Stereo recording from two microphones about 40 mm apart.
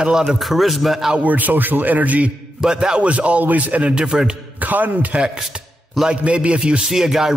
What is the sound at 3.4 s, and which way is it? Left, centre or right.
Speech, right.